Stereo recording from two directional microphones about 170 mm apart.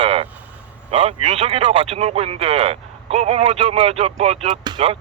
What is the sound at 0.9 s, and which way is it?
Speech, 35° right (ahead or behind).